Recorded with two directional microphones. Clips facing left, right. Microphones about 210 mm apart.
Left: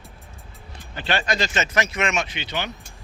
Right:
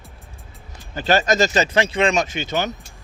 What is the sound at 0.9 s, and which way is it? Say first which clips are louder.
Speech: right 7 dB; 40° right (ahead or behind).